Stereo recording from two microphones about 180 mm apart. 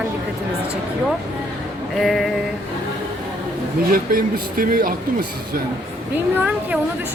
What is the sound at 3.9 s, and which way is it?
Speech, 50° right (ahead or behind).